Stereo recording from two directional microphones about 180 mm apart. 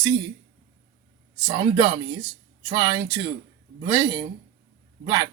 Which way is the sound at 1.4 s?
25° right (ahead or behind).